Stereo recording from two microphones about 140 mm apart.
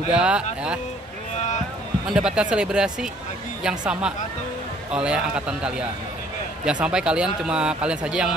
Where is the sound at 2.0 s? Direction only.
5° right (ahead or behind).